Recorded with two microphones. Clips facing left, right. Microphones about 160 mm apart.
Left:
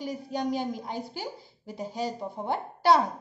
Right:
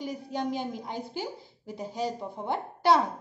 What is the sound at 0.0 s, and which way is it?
A woman's voice, 20° right (ahead or behind).